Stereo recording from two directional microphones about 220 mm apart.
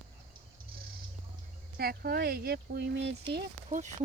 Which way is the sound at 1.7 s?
45° right (ahead or behind).